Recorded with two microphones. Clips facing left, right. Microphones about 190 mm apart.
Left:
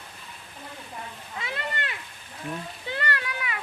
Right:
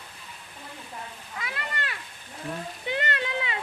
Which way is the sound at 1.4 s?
25° left (ahead or behind).